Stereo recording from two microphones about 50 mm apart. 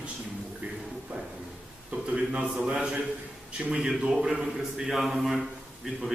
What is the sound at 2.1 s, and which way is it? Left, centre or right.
A man's voice, right.